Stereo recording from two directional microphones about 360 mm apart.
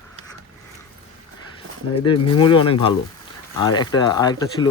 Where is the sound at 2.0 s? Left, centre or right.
Centre.